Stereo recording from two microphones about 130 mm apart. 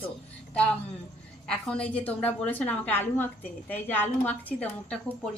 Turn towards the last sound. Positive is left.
turn(degrees=15)  # may be behind; listen again after turning